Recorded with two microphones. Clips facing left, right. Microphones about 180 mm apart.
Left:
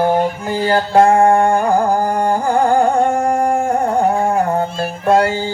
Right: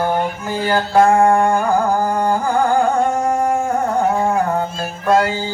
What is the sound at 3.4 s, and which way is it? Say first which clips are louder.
Carnatic music: left 2 dB; 55° left (ahead or behind).